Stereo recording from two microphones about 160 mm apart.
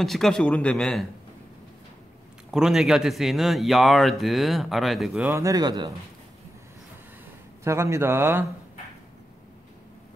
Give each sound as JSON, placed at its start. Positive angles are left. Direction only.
{"t": 0.0, "sound": "speech", "side_deg": 0}
{"t": 2.5, "sound": "speech", "side_deg": -5}
{"t": 5.3, "sound": "speech", "side_deg": -20}
{"t": 7.6, "sound": "a man's voice", "side_deg": -15}